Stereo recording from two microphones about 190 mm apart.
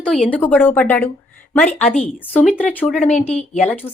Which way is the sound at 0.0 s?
5° left (ahead or behind).